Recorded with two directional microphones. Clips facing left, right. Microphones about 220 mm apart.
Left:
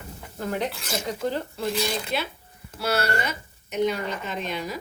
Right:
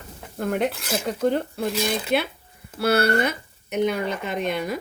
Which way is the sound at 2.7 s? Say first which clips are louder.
Right 6 dB; 60° right (ahead or behind).